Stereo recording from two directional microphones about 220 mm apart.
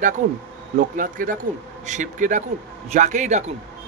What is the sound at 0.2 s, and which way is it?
Speech, 35° right (ahead or behind).